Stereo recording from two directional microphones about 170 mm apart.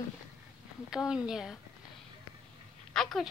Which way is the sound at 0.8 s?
5° right (ahead or behind).